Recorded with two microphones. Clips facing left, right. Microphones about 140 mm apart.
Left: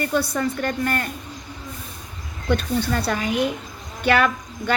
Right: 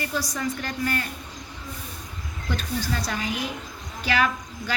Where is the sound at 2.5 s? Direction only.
60° left (ahead or behind).